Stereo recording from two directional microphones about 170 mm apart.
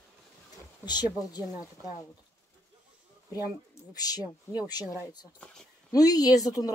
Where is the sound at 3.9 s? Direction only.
20° left (ahead or behind).